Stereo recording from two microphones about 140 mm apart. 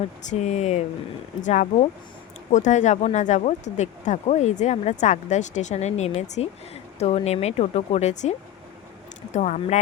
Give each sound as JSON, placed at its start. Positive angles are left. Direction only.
{"t": 0.3, "sound": "speech", "side_deg": 55}